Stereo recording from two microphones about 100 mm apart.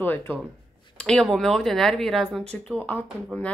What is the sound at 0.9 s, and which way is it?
Speech, 5° left (ahead or behind).